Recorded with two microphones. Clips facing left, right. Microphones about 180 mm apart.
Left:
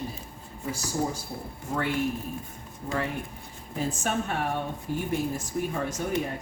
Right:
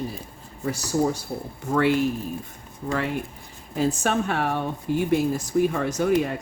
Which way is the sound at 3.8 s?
85° right.